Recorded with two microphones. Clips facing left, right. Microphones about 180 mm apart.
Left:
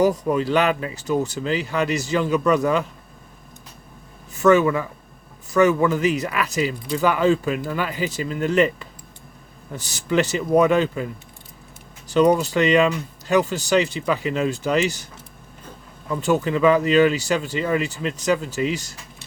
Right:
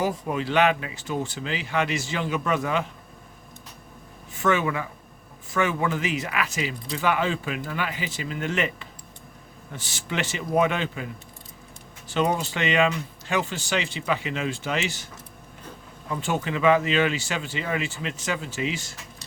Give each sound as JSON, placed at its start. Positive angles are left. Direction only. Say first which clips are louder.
{"t": 0.3, "sound": "speech", "louder": "left 3 dB", "side_deg": 40}
{"t": 4.4, "sound": "speech", "louder": "left 8 dB", "side_deg": 40}
{"t": 16.2, "sound": "speech", "louder": "left 5 dB", "side_deg": 40}